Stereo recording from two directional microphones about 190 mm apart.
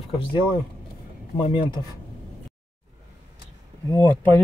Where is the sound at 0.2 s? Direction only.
25° left (ahead or behind).